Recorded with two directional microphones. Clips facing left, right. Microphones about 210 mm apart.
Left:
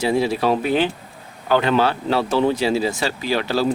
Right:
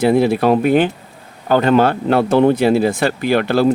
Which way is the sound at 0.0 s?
55° right (ahead or behind).